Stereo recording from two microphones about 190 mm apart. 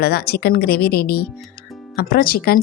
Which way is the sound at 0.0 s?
55° left (ahead or behind).